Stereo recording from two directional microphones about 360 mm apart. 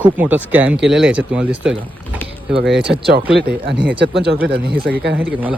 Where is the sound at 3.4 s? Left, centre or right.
Right.